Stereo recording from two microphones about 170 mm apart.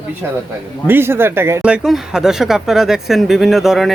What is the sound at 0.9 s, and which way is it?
Speech, 15° right (ahead or behind).